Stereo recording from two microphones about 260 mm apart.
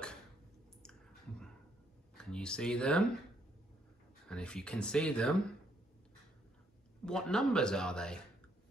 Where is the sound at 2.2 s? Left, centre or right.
Centre.